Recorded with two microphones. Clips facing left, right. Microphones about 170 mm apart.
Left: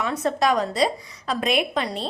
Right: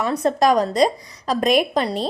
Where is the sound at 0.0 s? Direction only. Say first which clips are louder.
Right 4 dB; 35° right (ahead or behind).